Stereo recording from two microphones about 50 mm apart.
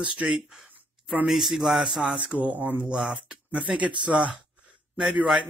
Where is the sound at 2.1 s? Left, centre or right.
Right.